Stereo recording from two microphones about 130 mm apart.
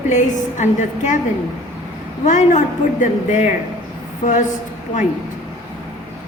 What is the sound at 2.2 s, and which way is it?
A woman's voice, 70° left (ahead or behind).